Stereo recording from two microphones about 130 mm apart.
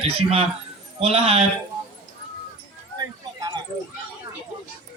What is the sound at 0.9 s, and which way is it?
Speech, 50° right (ahead or behind).